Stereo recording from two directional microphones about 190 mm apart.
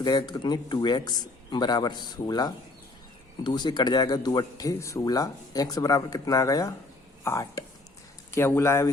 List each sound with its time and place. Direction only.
0.0 s speech: 20° left (ahead or behind)